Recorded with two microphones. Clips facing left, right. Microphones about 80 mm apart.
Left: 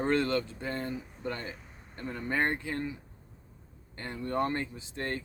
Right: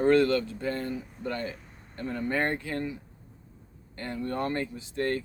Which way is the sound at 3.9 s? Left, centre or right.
Left.